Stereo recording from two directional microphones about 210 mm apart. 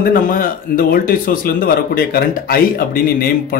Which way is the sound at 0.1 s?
40° left (ahead or behind).